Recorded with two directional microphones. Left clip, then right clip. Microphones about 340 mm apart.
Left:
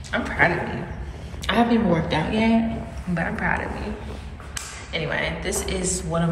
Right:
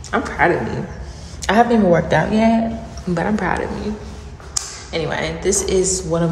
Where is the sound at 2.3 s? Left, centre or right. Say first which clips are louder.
Right 5 dB; right.